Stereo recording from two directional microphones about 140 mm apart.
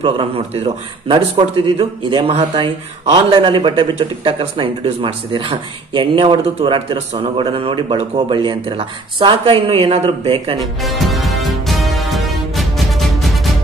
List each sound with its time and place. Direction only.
0.0 s a man's voice: 40° right (ahead or behind)
10.8 s music: centre (ahead or behind)